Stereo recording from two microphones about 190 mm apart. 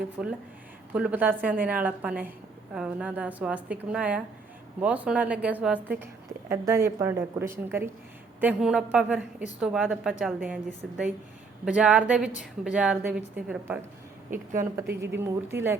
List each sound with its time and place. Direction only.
0.2 s a woman's voice: 5° right (ahead or behind)
15.0 s a woman's voice: 15° right (ahead or behind)